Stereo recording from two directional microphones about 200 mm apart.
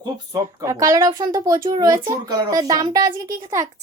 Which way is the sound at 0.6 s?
15° right (ahead or behind).